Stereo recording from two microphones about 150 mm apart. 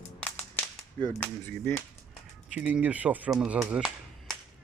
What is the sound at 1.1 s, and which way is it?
Speech, 15° left (ahead or behind).